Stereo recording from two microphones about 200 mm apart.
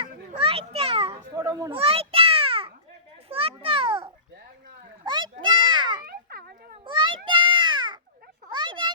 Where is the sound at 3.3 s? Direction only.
30° right (ahead or behind).